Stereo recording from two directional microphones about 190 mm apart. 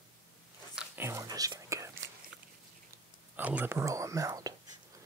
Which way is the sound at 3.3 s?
10° right (ahead or behind).